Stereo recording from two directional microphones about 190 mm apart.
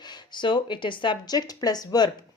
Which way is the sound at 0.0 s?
25° left (ahead or behind).